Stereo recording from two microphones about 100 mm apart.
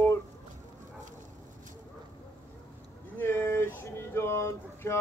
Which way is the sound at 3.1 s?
25° left (ahead or behind).